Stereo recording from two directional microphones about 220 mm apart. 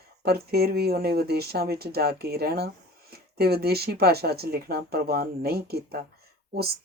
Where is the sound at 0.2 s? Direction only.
45° right (ahead or behind).